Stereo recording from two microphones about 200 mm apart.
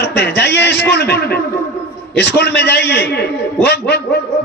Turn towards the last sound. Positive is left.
turn(degrees=55)  # may be behind; listen again after turning